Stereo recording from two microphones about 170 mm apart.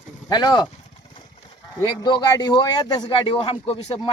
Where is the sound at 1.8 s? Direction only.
25° left (ahead or behind).